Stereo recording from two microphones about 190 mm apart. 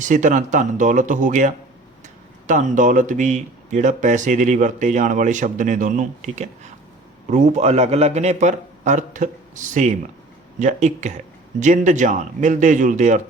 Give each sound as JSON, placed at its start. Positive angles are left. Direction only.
{"t": 0.0, "sound": "speech", "side_deg": -40}